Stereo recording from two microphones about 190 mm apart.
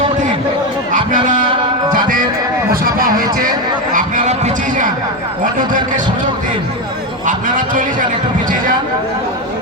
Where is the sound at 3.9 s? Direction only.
40° right (ahead or behind).